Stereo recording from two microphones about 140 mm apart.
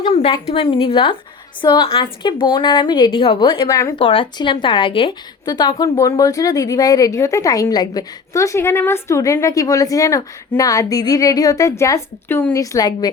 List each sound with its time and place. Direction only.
0.0 s a woman's voice: 45° left (ahead or behind)
3.7 s speech: 20° left (ahead or behind)
3.9 s a woman's voice: 40° left (ahead or behind); by 12.5 s 15° left (ahead or behind)
12.5 s speech: 25° left (ahead or behind)